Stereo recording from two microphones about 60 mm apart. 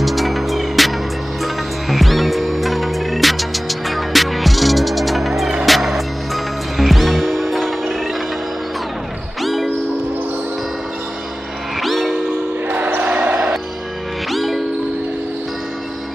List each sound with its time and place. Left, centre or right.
0.0 s music: centre
9.4 s music: centre
11.8 s train: centre
12.6 s basketball bounce: right
14.3 s music: centre